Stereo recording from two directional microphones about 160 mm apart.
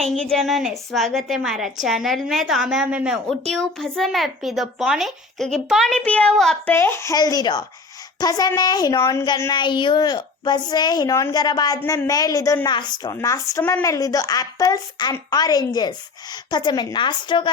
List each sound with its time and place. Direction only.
0.0 s a woman's voice: 5° left (ahead or behind)
6.7 s a woman's voice: 15° left (ahead or behind)